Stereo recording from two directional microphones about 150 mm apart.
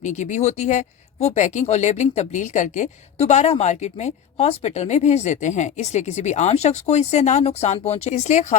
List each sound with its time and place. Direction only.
0.0 s speech: 55° left (ahead or behind)